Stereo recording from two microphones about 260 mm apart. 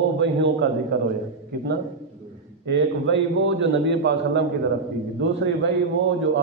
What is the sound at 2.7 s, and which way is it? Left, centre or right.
A man's voice, right.